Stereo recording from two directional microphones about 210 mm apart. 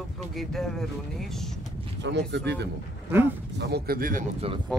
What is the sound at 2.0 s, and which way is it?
Speech, 55° right (ahead or behind).